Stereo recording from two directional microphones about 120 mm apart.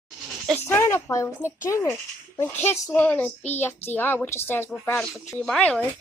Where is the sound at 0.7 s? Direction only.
20° left (ahead or behind).